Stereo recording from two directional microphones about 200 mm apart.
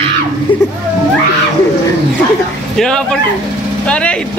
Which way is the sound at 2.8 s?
5° left (ahead or behind).